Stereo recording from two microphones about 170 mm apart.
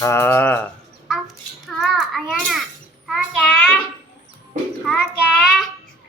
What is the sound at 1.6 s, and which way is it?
Child singing, centre (ahead or behind).